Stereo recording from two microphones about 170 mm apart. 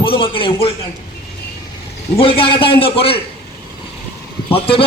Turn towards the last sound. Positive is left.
turn(degrees=35)  # may be behind; listen again after turning